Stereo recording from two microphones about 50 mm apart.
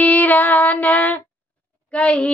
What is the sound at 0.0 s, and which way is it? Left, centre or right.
Female singing, left.